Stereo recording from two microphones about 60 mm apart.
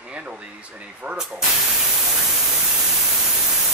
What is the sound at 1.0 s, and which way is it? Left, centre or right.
Speech, right.